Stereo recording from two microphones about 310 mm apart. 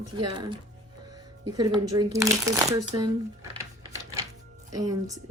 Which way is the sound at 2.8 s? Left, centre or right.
Right.